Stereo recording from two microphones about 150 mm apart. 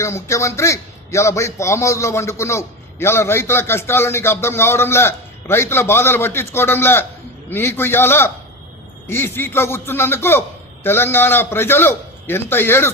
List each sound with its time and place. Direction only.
0.0 s a man's voice: 20° left (ahead or behind)